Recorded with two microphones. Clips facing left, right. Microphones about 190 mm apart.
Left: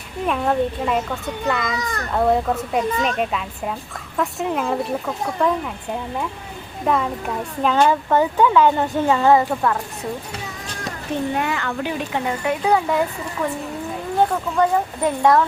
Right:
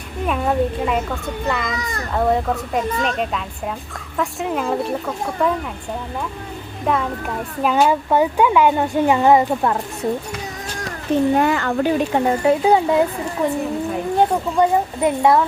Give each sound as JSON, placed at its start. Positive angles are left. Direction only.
{"t": 0.3, "sound": "a woman's voice", "side_deg": 0}
{"t": 6.8, "sound": "a woman's voice", "side_deg": 0}
{"t": 11.3, "sound": "speech", "side_deg": -40}